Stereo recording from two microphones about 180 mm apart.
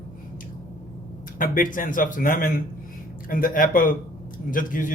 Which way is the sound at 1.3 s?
50° left (ahead or behind).